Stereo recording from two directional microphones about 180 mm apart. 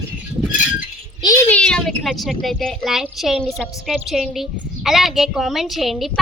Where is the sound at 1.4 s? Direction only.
5° left (ahead or behind).